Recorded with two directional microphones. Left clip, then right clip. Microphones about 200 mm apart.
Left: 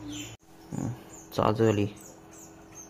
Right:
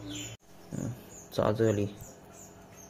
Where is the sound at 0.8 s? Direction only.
15° left (ahead or behind).